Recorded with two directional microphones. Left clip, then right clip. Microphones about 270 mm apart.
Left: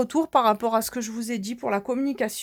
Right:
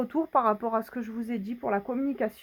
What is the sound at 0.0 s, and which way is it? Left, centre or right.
Speech, left.